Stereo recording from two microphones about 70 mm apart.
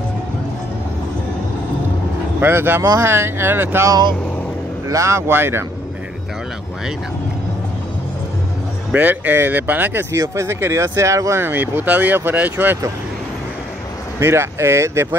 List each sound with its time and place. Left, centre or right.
2.4 s speech: right
4.8 s speech: right
8.9 s speech: right
10.1 s speech: right
11.4 s speech: right
14.2 s speech: right